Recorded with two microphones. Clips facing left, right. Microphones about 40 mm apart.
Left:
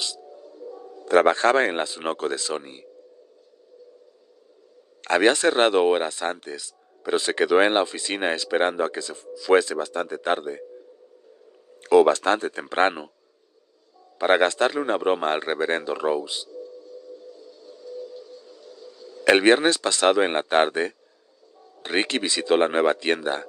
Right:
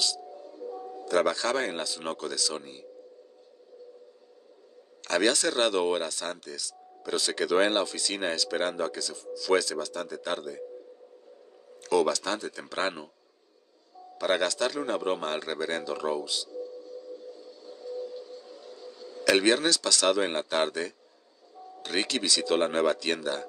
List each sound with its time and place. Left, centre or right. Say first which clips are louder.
0.3 s music: even; centre
1.0 s a man's voice: left 8 dB; left
5.0 s speech: left 7 dB; left
11.8 s a man's voice: left 9 dB; left
14.1 s a man's voice: left 7 dB; left
17.6 s a sound: right 1 dB; centre
19.2 s a man's voice: left 6 dB; left